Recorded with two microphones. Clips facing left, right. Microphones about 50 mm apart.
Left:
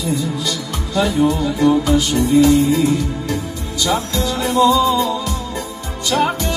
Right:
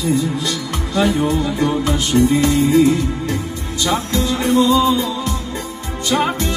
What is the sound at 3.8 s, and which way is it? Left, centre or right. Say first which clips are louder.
Music: even; right.